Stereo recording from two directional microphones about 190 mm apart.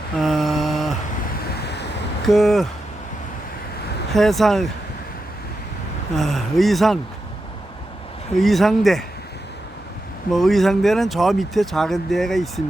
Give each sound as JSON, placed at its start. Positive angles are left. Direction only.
{"t": 0.2, "sound": "mantra", "side_deg": 0}
{"t": 1.6, "sound": "a sound", "side_deg": 60}
{"t": 2.2, "sound": "speech", "side_deg": 0}
{"t": 4.1, "sound": "speech", "side_deg": 0}
{"t": 6.1, "sound": "speech", "side_deg": 0}
{"t": 8.4, "sound": "speech", "side_deg": 0}
{"t": 10.3, "sound": "speech", "side_deg": 0}